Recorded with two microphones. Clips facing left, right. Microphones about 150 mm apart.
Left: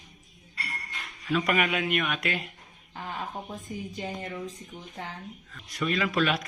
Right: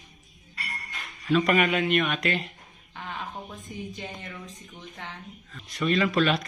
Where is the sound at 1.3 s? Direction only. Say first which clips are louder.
Right 4 dB; 5° left (ahead or behind).